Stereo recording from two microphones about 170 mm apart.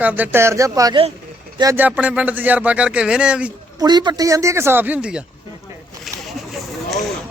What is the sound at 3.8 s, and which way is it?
Speech, 25° right (ahead or behind).